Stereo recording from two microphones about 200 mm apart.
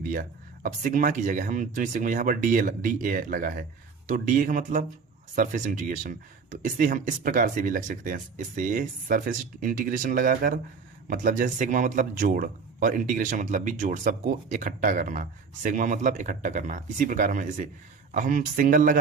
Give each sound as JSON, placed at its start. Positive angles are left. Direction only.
{"t": 0.1, "sound": "a man's voice", "side_deg": -45}